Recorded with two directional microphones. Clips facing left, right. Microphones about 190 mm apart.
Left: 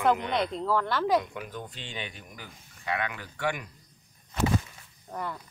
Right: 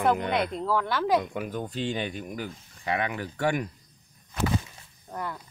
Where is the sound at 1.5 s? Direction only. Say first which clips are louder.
Right 9 dB; 40° right (ahead or behind).